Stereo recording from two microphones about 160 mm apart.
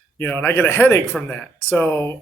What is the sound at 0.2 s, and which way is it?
Speech, 10° left (ahead or behind).